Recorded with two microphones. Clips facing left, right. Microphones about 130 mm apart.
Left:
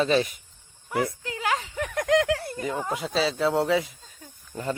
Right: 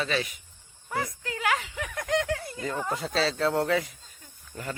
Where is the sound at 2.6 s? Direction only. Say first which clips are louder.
Left 2 dB; 15° left (ahead or behind).